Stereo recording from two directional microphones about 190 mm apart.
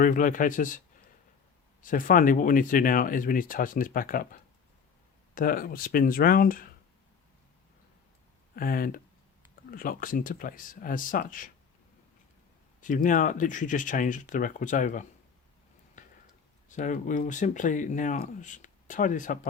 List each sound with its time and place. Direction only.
0.0 s speech: 45° left (ahead or behind)
1.8 s speech: 45° left (ahead or behind)
8.5 s speech: 50° left (ahead or behind)
12.8 s speech: 45° left (ahead or behind)
16.0 s a sound: 40° left (ahead or behind)
16.6 s speech: 40° left (ahead or behind)